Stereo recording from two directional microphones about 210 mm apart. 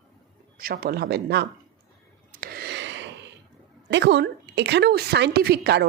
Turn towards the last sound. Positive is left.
turn(degrees=-50)  # may be behind; listen again after turning